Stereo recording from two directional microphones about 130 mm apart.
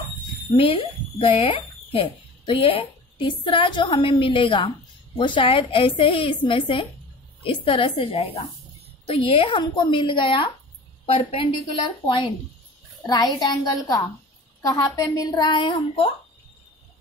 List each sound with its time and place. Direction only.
0.6 s a woman's voice: 45° left (ahead or behind)